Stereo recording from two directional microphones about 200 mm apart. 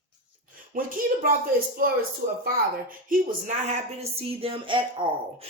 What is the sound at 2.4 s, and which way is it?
A woman's voice, 45° right (ahead or behind).